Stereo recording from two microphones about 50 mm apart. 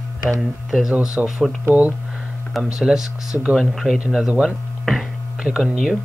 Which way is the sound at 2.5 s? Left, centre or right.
Centre.